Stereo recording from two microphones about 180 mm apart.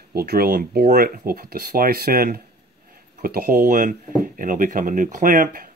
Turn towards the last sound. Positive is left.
turn(degrees=-50)  # may be behind; listen again after turning